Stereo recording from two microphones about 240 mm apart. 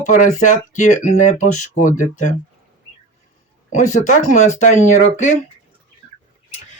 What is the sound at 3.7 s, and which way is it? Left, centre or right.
Speech, left.